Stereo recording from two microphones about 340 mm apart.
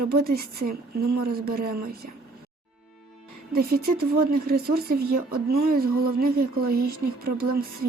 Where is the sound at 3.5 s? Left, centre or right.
Right.